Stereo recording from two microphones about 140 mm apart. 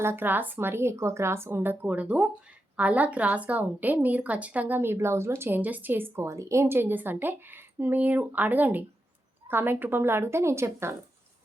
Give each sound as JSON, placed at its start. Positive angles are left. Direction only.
{"t": 0.0, "sound": "a woman's voice", "side_deg": -15}